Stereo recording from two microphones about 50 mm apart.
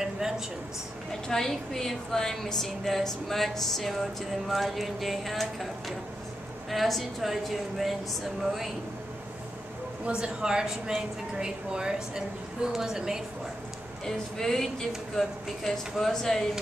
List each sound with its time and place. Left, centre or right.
1.3 s a woman's voice: centre
10.0 s a woman's voice: centre
14.0 s a woman's voice: centre